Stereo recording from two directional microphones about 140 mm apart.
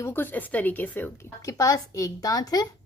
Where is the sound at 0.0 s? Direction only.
15° left (ahead or behind).